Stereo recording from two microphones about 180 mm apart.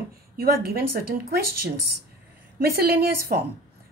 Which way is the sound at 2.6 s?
60° right (ahead or behind).